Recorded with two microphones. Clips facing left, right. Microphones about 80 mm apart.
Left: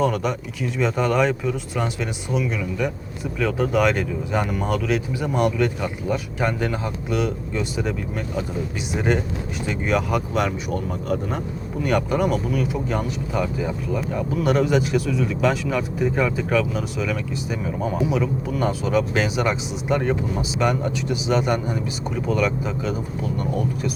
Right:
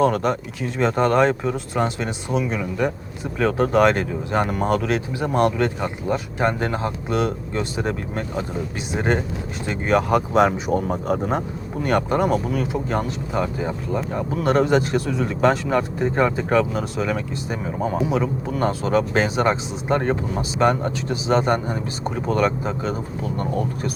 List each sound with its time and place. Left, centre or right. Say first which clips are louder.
0.0 s speech: right 3 dB; right